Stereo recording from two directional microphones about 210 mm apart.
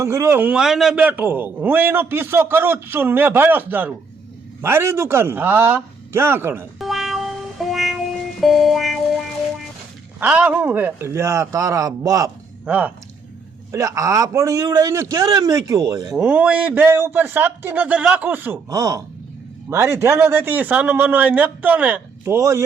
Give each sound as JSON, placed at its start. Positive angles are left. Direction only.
{"t": 0.0, "sound": "a man's voice", "side_deg": -15}
{"t": 6.7, "sound": "music", "side_deg": 0}
{"t": 10.2, "sound": "a man's voice", "side_deg": -5}